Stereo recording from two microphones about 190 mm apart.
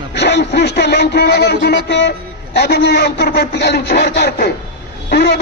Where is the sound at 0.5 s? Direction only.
60° left (ahead or behind).